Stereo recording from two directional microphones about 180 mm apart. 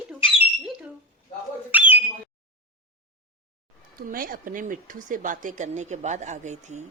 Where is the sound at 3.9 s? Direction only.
55° right (ahead or behind).